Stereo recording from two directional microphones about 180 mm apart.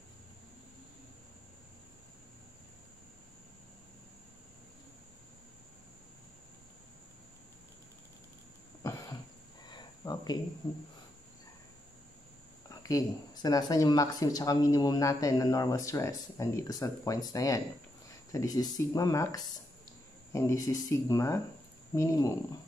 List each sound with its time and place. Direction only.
8.8 s throat clearing: 20° left (ahead or behind)
9.7 s cricket: 25° left (ahead or behind)
12.6 s speech: 20° left (ahead or behind)